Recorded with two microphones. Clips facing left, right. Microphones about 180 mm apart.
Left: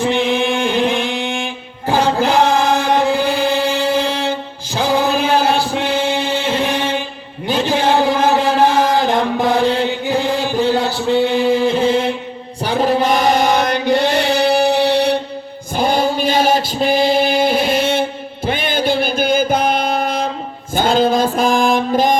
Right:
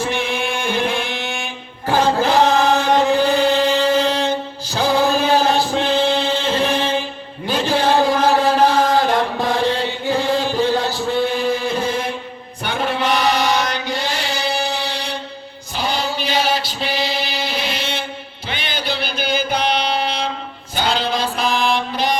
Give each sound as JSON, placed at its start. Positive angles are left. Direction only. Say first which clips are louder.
{"t": 0.1, "sound": "chant", "louder": "left 6 dB", "side_deg": 20}
{"t": 11.2, "sound": "music", "louder": "left 5 dB", "side_deg": 20}
{"t": 12.6, "sound": "chant", "louder": "left 5 dB", "side_deg": 35}
{"t": 15.7, "sound": "a sound", "louder": "left 7 dB", "side_deg": 50}
{"t": 18.4, "sound": "music", "louder": "left 8 dB", "side_deg": 50}
{"t": 20.7, "sound": "a sound", "louder": "left 7 dB", "side_deg": 45}